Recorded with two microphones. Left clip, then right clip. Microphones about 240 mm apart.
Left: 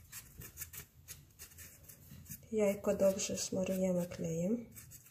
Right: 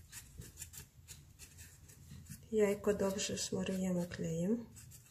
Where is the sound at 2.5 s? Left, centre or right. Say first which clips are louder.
Even; right.